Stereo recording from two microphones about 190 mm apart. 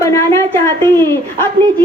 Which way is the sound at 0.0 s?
15° left (ahead or behind).